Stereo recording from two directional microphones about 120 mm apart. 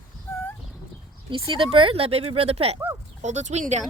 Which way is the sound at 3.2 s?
80° right.